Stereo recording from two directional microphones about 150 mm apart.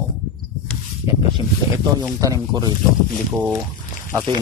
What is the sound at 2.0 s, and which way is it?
Speech, 20° right (ahead or behind).